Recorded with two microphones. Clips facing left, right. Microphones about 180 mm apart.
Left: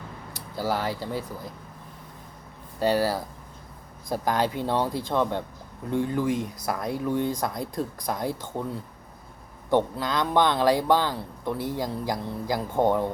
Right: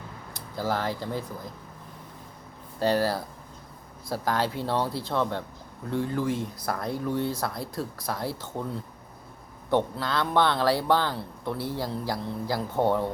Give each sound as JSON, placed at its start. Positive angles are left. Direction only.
{"t": 0.3, "sound": "speech", "side_deg": 10}
{"t": 2.7, "sound": "speech", "side_deg": 10}
{"t": 9.6, "sound": "speech", "side_deg": 15}